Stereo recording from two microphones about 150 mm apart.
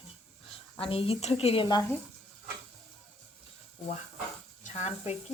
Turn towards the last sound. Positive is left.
turn(degrees=50)  # may be behind; listen again after turning